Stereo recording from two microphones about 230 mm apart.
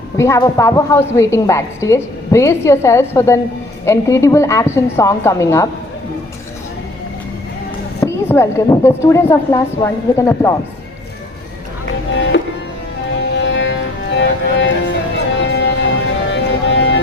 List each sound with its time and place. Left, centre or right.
0.2 s a woman's voice: centre
8.0 s a woman's voice: centre
13.1 s music: left